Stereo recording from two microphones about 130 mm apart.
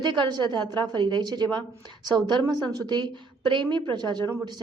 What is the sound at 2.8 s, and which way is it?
A woman's voice, 35° right (ahead or behind).